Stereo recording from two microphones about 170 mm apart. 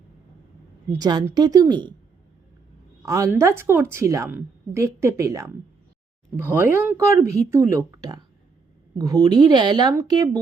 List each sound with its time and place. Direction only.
0.9 s speech: 20° right (ahead or behind)
3.1 s a woman's voice: 15° right (ahead or behind)